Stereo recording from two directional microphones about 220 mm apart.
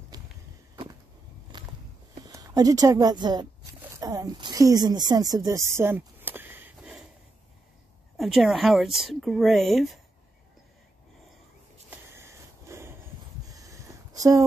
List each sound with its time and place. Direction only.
0.1 s a sound: 15° right (ahead or behind)
1.5 s walk: 20° right (ahead or behind)
2.2 s a woman's voice: 15° right (ahead or behind)
8.2 s speech: centre (ahead or behind)
12.2 s wheeze: 10° right (ahead or behind)
13.5 s a sound: 15° right (ahead or behind)